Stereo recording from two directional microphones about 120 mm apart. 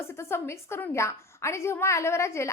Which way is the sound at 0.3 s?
20° left (ahead or behind).